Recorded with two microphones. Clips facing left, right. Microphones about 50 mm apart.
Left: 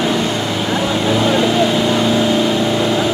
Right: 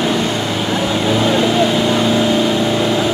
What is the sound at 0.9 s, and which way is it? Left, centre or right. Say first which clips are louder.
Vehicle: even; centre.